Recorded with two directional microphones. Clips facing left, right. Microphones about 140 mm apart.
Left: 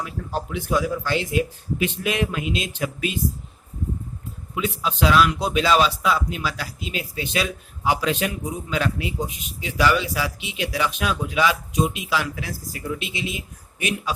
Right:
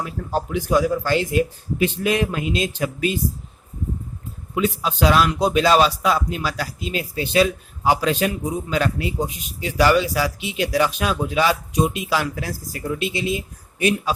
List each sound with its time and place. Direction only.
0.0 s a man's voice: 40° right (ahead or behind)
4.5 s a man's voice: 45° right (ahead or behind)